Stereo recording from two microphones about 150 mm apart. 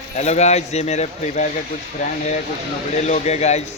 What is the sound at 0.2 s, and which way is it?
Speech, 50° left (ahead or behind).